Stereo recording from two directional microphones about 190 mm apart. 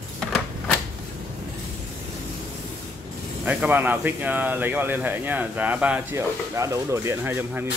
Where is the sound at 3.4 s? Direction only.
10° right (ahead or behind).